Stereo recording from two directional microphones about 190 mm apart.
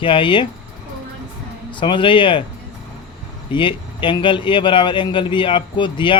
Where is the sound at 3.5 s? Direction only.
25° left (ahead or behind).